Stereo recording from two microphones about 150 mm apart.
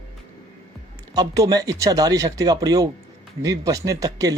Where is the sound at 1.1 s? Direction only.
25° right (ahead or behind).